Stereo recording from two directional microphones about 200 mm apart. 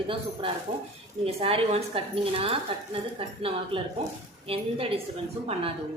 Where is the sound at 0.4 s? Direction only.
25° right (ahead or behind).